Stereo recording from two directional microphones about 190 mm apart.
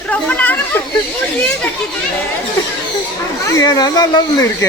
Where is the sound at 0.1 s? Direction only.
5° left (ahead or behind).